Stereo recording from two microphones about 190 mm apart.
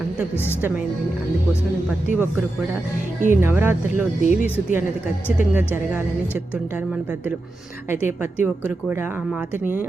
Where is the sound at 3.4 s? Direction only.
10° right (ahead or behind).